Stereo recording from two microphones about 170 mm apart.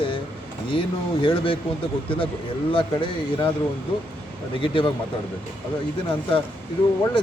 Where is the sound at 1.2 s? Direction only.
30° left (ahead or behind).